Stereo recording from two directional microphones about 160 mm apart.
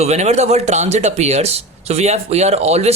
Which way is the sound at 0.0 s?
45° right (ahead or behind).